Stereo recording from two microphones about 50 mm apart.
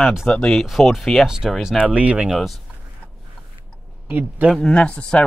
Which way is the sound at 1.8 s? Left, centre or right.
Right.